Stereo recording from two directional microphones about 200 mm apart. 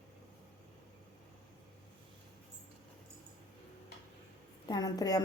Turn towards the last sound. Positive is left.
turn(degrees=20)  # may be behind; listen again after turning